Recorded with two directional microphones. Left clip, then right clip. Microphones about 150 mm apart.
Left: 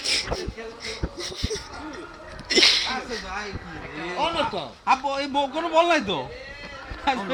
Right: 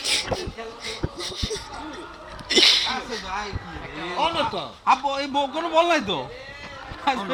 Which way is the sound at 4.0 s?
20° right (ahead or behind).